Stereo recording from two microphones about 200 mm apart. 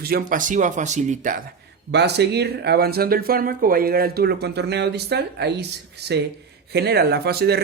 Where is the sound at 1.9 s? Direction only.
55° right (ahead or behind).